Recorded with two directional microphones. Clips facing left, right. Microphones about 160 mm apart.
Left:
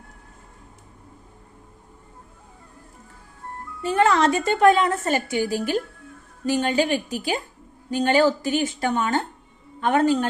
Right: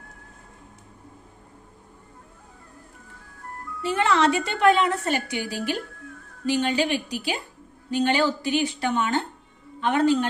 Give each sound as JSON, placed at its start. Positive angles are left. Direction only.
{"t": 3.8, "sound": "a woman's voice", "side_deg": 45}